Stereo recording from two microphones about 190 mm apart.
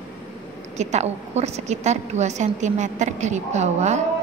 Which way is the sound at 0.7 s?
35° right (ahead or behind).